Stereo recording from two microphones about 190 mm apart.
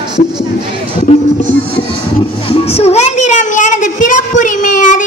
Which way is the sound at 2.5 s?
30° left (ahead or behind).